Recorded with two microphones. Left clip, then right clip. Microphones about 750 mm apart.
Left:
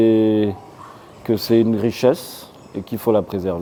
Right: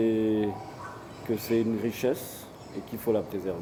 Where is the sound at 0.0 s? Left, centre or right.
Left.